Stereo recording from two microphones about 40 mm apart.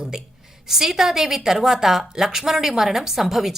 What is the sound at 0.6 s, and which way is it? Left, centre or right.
A woman's voice, centre.